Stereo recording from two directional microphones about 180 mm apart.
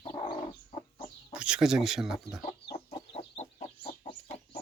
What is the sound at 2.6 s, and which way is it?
Chicken, 25° left (ahead or behind).